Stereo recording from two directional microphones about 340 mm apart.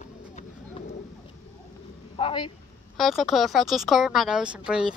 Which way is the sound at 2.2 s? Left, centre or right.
Centre.